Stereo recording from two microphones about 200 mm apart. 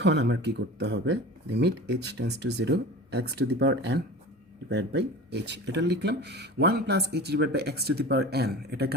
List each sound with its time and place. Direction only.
0.0 s speech: 60° right (ahead or behind)